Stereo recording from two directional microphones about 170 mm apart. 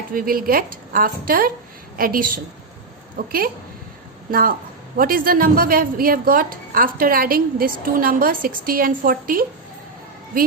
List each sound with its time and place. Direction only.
0.1 s a woman's voice: 55° right (ahead or behind)